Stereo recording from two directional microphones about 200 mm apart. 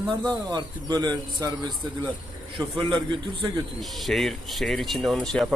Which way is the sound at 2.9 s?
25° right (ahead or behind).